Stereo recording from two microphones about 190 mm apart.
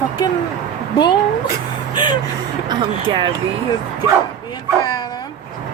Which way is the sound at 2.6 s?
25° right (ahead or behind).